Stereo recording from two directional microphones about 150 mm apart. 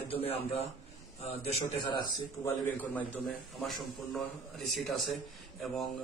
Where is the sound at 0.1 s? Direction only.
40° left (ahead or behind).